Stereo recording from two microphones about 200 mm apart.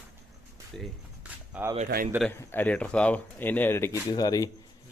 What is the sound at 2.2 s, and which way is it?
Speech, 10° left (ahead or behind).